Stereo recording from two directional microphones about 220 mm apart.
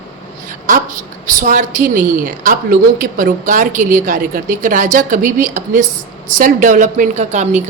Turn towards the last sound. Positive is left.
turn(degrees=-35)  # may be behind; listen again after turning